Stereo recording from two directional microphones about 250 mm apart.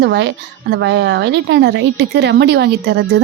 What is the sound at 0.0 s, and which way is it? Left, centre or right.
Speech, right.